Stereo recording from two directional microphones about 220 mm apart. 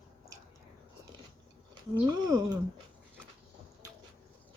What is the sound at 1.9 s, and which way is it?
Speech, 15° right (ahead or behind).